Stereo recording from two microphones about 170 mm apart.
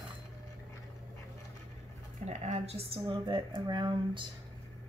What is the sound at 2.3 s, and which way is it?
Speech, 40° right (ahead or behind).